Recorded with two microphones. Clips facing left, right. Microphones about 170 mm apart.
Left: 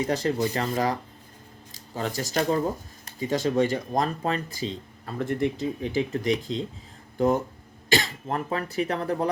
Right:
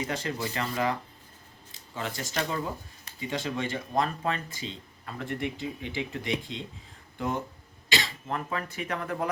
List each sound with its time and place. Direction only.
0.1 s speech: 35° left (ahead or behind)
7.9 s speech: 40° left (ahead or behind)